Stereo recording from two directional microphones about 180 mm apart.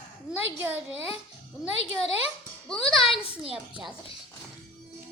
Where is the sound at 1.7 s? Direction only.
35° left (ahead or behind).